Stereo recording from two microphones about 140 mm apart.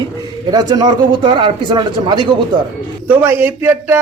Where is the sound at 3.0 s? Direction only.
15° right (ahead or behind).